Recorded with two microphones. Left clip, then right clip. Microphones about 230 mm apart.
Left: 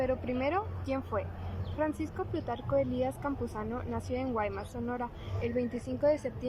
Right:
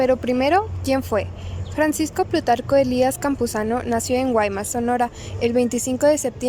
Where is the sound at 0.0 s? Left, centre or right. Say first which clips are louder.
Right 13 dB; right.